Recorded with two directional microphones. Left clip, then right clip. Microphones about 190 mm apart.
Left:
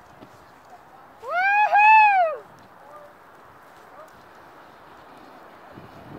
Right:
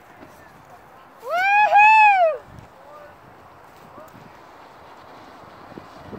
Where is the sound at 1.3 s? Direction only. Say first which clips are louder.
Right 3 dB; 60° right (ahead or behind).